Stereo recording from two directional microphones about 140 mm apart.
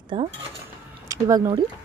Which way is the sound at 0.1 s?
35° right (ahead or behind).